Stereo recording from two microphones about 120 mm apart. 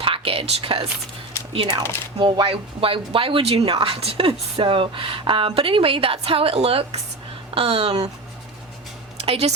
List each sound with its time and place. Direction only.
0.0 s whispering: 50° right (ahead or behind)
2.1 s speech: 40° right (ahead or behind); by 8.1 s 55° right (ahead or behind)
9.2 s speech: 55° right (ahead or behind)